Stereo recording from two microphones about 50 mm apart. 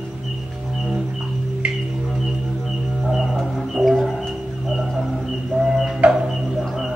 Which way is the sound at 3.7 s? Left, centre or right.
Centre.